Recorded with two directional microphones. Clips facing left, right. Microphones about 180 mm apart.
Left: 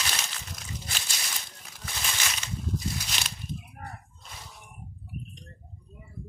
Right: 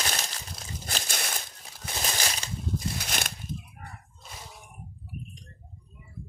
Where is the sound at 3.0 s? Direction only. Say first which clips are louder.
Right 4 dB; 55° right (ahead or behind).